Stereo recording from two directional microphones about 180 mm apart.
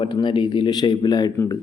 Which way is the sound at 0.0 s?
25° left (ahead or behind).